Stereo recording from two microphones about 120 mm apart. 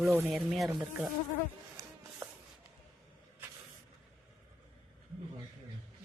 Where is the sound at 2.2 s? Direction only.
25° right (ahead or behind).